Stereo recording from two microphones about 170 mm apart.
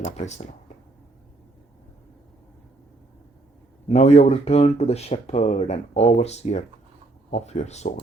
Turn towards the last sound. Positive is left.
turn(degrees=40)  # may be behind; listen again after turning